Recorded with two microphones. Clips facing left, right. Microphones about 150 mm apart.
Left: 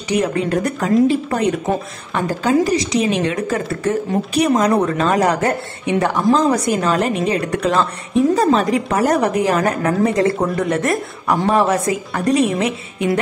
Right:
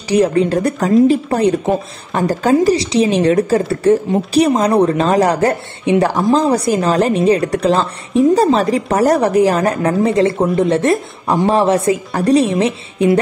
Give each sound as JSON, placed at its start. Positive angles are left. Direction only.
{"t": 0.1, "sound": "a woman's voice", "side_deg": -35}